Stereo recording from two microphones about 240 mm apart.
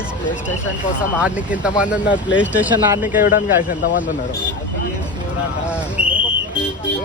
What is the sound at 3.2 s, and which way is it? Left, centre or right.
Speech, left.